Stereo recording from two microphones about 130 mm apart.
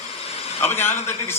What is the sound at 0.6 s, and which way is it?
Speech, 15° left (ahead or behind).